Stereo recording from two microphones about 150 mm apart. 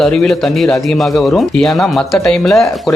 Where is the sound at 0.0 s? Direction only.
5° left (ahead or behind).